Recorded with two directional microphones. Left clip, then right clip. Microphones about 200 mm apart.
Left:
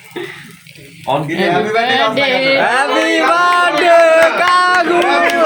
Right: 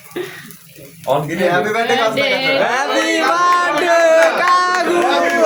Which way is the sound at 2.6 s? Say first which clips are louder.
Left 3 dB; 15° left (ahead or behind).